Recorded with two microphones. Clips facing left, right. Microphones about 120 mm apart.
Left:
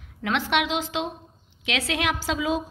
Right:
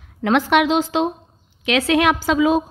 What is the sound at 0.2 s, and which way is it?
A woman's voice, 45° right (ahead or behind).